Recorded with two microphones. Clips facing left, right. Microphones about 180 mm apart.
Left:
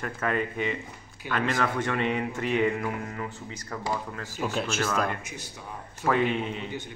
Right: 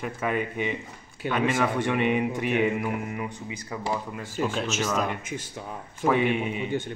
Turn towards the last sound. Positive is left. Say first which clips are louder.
# right 7 dB
turn(degrees=-50)  # may be behind; listen again after turning